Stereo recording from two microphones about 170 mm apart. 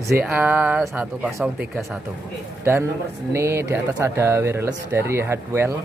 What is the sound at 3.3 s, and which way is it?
Speech, 15° right (ahead or behind).